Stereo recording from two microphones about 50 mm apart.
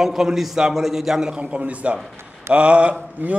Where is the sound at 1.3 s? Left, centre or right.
Right.